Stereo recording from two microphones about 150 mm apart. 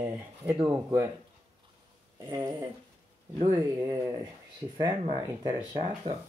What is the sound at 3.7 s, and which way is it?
Speech, 20° right (ahead or behind).